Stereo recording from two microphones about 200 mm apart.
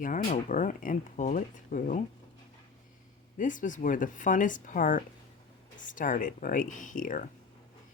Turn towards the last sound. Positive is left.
turn(degrees=40)  # may be behind; listen again after turning